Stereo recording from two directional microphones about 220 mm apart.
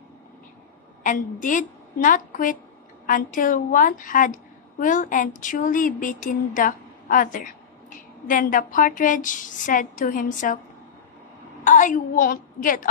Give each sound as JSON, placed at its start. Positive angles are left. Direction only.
{"t": 1.0, "sound": "a woman's voice", "side_deg": 35}
{"t": 11.6, "sound": "a woman's voice", "side_deg": 35}